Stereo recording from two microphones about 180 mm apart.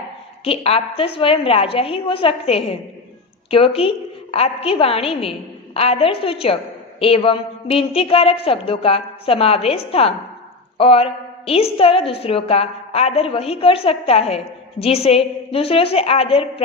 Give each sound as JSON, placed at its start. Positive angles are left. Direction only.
{"t": 0.4, "sound": "a woman's voice", "side_deg": 35}